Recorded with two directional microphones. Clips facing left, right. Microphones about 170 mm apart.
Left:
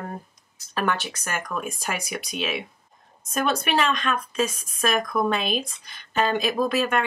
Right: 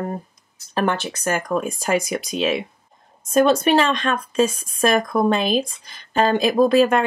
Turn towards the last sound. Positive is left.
turn(degrees=-30)  # may be behind; listen again after turning